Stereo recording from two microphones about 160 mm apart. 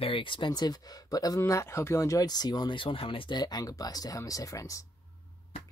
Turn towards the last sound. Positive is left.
turn(degrees=20)  # may be behind; listen again after turning